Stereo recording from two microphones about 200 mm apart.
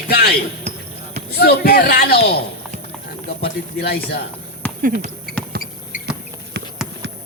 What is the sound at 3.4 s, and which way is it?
Speech, 55° left (ahead or behind).